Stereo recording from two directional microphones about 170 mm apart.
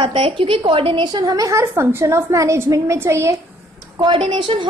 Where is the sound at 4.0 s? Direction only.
30° right (ahead or behind).